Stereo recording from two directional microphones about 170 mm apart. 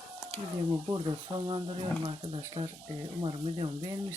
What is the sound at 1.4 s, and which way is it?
Speech, 30° right (ahead or behind).